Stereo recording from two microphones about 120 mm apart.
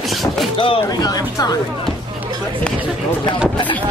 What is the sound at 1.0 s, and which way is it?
Speech, 35° left (ahead or behind).